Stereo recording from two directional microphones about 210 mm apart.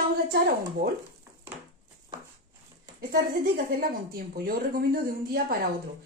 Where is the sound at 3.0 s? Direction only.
45° right (ahead or behind).